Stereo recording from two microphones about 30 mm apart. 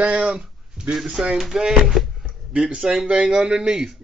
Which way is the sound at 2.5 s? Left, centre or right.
Right.